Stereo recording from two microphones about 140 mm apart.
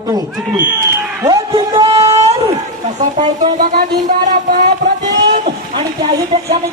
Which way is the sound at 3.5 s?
80° right.